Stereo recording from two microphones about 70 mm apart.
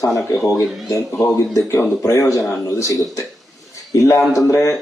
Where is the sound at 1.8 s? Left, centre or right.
Left.